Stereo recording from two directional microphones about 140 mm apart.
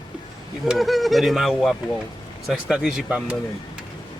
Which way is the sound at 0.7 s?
Centre (ahead or behind).